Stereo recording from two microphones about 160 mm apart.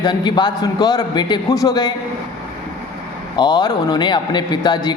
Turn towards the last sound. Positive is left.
turn(degrees=25)  # may be behind; listen again after turning